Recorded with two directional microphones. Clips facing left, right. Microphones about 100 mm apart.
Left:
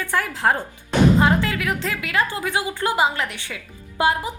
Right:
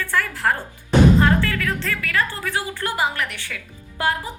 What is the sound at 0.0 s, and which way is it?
A woman's voice, 20° left (ahead or behind).